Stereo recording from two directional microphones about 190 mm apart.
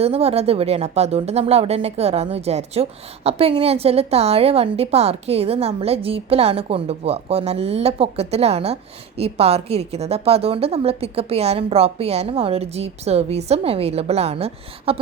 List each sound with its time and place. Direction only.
0.0 s a woman's voice: 30° right (ahead or behind)